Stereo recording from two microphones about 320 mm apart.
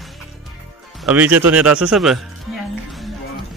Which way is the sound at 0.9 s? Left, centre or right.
Centre.